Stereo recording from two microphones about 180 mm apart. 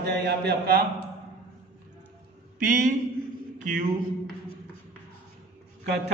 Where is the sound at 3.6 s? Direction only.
45° right (ahead or behind).